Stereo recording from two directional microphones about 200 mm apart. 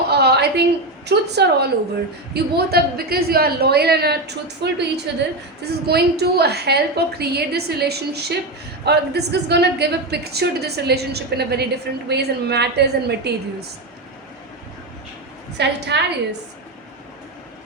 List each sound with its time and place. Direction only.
0.1 s a sound: 55° right (ahead or behind)
1.0 s a woman's voice: 55° right (ahead or behind)
15.5 s a woman's voice: 60° right (ahead or behind)